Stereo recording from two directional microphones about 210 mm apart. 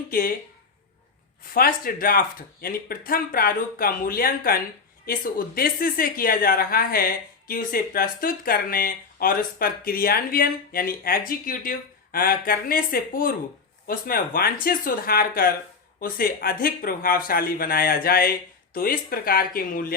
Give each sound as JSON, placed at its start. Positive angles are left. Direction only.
{"t": 0.1, "sound": "speech", "side_deg": 40}
{"t": 1.5, "sound": "speech", "side_deg": 45}